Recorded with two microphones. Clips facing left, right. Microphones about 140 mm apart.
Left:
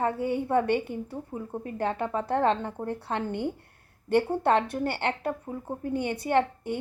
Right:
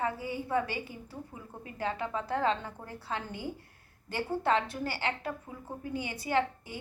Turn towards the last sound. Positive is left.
turn(degrees=60)  # may be behind; listen again after turning